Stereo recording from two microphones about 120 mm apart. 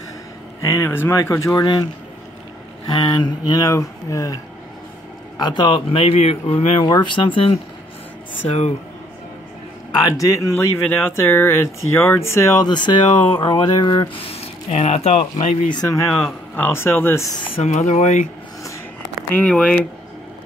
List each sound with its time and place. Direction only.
0.6 s speech: 25° left (ahead or behind)
2.9 s speech: 40° left (ahead or behind)
5.4 s speech: 40° left (ahead or behind)
8.5 s speech: 65° left (ahead or behind)
9.9 s speech: 30° left (ahead or behind)
12.6 s speech: 40° left (ahead or behind)
14.2 s speech: 55° left (ahead or behind)
15.7 s speech: 25° left (ahead or behind)
17.6 s speech: 75° left (ahead or behind)
19.4 s speech: 5° left (ahead or behind)